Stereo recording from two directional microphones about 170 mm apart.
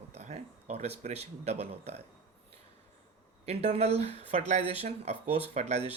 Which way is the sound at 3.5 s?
35° right (ahead or behind).